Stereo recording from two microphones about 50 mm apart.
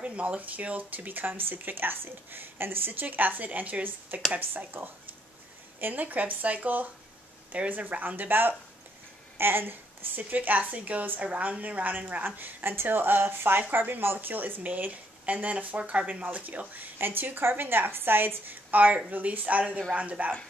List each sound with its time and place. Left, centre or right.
0.0 s a woman's voice: right
10.3 s speech: right